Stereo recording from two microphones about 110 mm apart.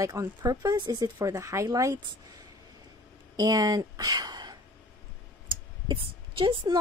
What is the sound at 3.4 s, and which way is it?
A woman's voice, 35° right (ahead or behind).